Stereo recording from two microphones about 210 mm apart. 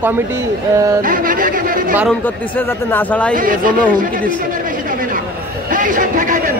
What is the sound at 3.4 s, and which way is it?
Speech, 40° right (ahead or behind).